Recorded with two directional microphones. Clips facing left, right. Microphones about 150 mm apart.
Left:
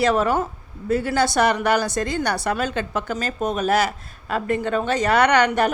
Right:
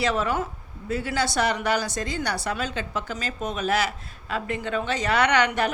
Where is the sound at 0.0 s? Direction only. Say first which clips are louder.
Left 5 dB; 45° left (ahead or behind).